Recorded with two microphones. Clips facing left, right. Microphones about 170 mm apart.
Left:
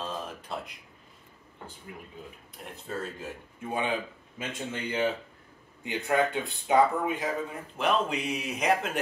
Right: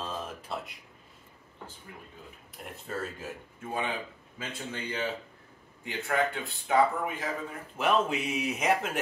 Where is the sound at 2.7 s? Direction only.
5° right (ahead or behind).